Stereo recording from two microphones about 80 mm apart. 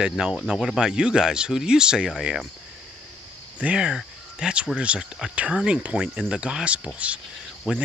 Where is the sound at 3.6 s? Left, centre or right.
Centre.